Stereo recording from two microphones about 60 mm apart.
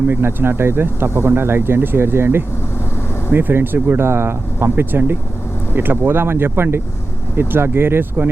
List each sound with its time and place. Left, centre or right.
0.1 s speech: right